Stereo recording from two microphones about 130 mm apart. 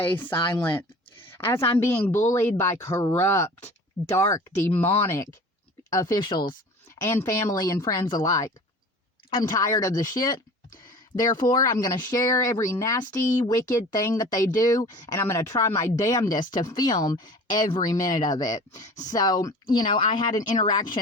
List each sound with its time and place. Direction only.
0.0 s speech: 15° left (ahead or behind); by 6.4 s 35° left (ahead or behind)
7.0 s speech: 20° left (ahead or behind)